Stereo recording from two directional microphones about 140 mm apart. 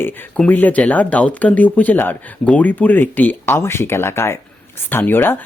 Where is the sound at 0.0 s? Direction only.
10° left (ahead or behind).